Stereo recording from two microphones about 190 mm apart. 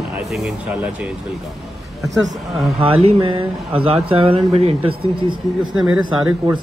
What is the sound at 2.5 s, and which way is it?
Speech, centre (ahead or behind).